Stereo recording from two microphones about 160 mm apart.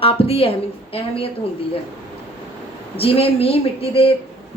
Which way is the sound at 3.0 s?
35° left (ahead or behind).